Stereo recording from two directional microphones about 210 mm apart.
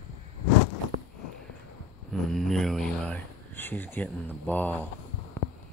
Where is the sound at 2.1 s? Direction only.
Centre (ahead or behind).